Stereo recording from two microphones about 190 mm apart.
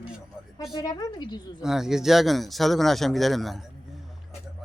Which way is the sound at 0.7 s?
20° left (ahead or behind).